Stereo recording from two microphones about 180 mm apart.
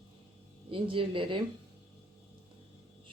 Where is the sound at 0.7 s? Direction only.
30° right (ahead or behind).